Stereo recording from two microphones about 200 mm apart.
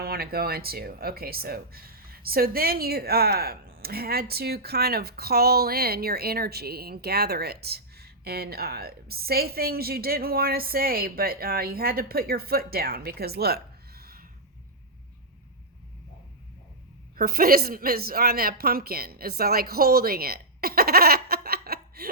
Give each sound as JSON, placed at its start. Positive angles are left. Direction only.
{"t": 0.0, "sound": "speech", "side_deg": -50}
{"t": 13.1, "sound": "a sound", "side_deg": -50}
{"t": 17.2, "sound": "a woman's voice", "side_deg": -50}